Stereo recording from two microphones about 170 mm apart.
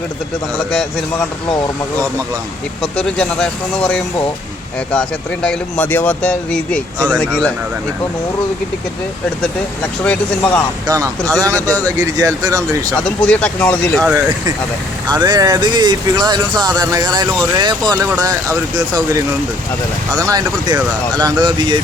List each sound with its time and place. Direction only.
2.8 s speech: 5° left (ahead or behind)
10.0 s speech: 5° left (ahead or behind)
10.8 s speech: 20° right (ahead or behind)
12.9 s speech: 5° left (ahead or behind)
15.0 s speech: 25° right (ahead or behind)
20.1 s speech: 20° right (ahead or behind)